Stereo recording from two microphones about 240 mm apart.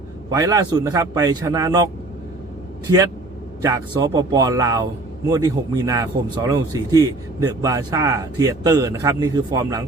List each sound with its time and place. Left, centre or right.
0.3 s a man's voice: centre
3.6 s a man's voice: centre